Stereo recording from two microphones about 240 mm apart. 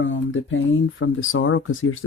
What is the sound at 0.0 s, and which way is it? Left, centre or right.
Speech, left.